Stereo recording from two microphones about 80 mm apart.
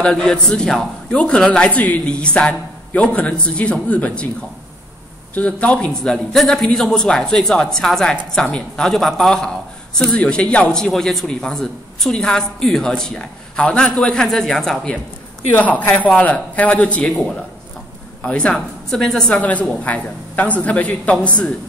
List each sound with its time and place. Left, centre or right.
0.0 s a man's voice: centre
5.3 s a man's voice: centre
15.5 s a woman's voice: left; by 19.3 s centre
19.3 s a woman's voice: centre